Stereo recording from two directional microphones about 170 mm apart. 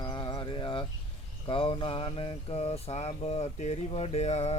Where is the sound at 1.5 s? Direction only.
30° left (ahead or behind).